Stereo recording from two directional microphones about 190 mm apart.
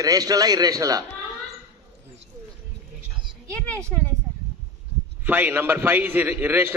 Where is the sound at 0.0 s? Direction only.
20° right (ahead or behind).